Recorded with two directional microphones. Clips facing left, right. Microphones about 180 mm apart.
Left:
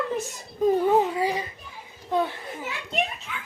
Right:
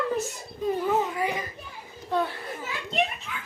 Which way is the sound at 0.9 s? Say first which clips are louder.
Left 4 dB; 30° left (ahead or behind).